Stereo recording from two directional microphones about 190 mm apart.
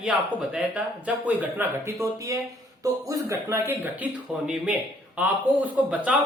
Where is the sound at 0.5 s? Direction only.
5° right (ahead or behind).